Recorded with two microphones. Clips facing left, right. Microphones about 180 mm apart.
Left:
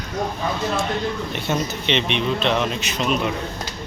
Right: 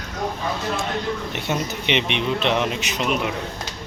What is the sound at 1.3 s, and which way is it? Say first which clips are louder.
Speech: left 1 dB; 15° right (ahead or behind).